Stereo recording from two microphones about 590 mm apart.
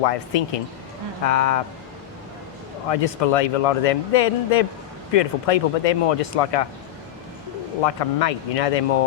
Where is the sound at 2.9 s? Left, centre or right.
Left.